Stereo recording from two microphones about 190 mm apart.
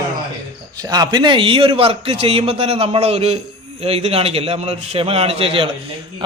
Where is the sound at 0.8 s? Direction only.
20° right (ahead or behind).